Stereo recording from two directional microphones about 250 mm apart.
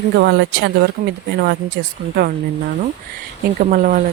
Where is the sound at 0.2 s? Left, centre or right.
Right.